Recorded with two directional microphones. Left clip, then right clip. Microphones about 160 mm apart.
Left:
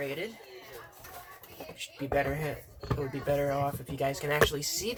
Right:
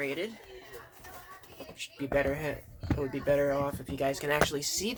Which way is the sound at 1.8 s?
50° right (ahead or behind).